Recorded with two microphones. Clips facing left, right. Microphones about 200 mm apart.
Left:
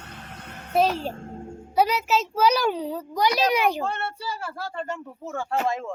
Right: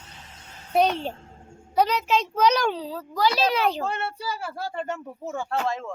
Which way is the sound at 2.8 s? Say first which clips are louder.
Left 1 dB; 20° left (ahead or behind).